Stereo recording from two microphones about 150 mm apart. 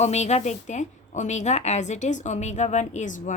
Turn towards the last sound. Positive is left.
turn(degrees=55)  # may be behind; listen again after turning